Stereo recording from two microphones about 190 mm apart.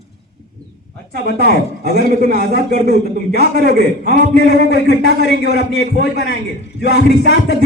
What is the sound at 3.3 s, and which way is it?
Speech, 55° right (ahead or behind).